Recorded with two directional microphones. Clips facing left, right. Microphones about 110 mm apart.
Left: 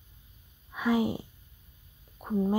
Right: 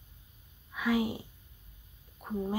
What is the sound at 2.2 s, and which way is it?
Speech, 15° left (ahead or behind).